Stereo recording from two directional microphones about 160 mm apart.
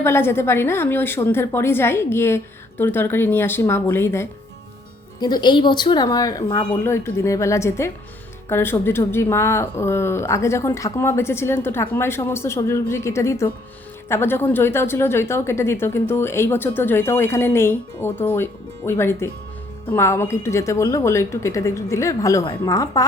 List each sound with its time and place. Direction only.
0.0 s speech: 15° left (ahead or behind)
5.2 s speech: 25° left (ahead or behind)